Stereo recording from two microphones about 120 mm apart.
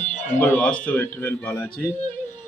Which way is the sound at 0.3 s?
15° left (ahead or behind).